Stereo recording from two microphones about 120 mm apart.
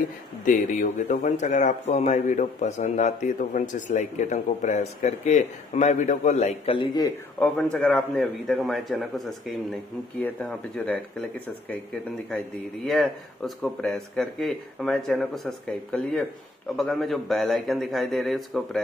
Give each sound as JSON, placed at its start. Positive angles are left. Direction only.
{"t": 0.5, "sound": "speech", "side_deg": 90}
{"t": 7.3, "sound": "speech", "side_deg": 10}
{"t": 12.8, "sound": "speech", "side_deg": 0}